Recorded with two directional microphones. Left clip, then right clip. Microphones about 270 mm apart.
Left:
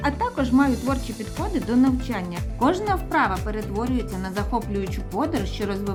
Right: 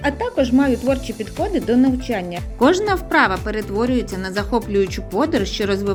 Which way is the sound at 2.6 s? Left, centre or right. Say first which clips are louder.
Right 6 dB; centre.